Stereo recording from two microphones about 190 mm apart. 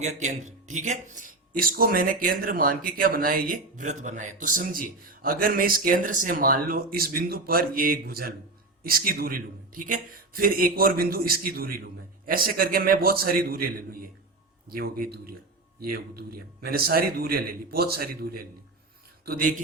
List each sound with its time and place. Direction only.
0.0 s speech: 40° right (ahead or behind)